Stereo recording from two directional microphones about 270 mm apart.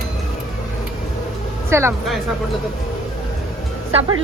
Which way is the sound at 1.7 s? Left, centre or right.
Centre.